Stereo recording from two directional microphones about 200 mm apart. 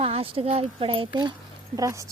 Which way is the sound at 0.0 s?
30° right (ahead or behind).